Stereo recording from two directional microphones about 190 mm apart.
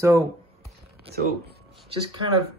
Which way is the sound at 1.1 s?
55° right (ahead or behind).